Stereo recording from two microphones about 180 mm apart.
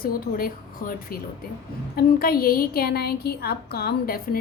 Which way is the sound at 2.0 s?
55° left (ahead or behind).